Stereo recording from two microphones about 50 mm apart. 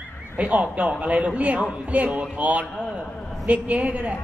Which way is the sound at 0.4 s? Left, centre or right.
Right.